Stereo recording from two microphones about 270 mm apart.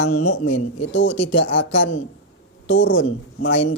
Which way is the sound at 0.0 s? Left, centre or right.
Left.